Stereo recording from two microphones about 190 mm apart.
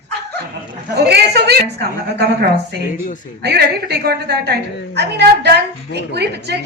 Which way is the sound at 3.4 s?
60° right (ahead or behind).